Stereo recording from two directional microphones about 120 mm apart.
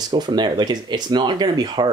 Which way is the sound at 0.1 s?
40° right (ahead or behind).